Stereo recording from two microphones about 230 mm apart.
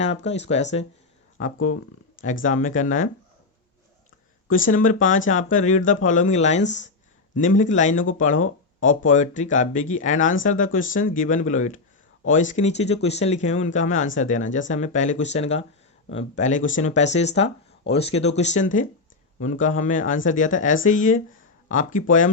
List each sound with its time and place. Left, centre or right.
0.3 s speech: left
2.2 s speech: left
4.4 s speech: left